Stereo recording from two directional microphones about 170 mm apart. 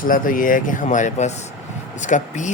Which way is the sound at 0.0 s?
55° left (ahead or behind).